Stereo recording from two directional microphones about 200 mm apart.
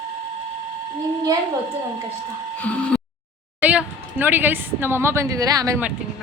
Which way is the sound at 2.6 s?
5° left (ahead or behind).